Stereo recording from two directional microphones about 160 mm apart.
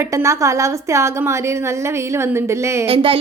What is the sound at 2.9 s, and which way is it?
Speech, 35° right (ahead or behind).